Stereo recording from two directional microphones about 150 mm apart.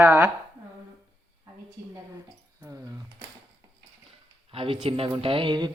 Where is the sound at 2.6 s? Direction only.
20° right (ahead or behind).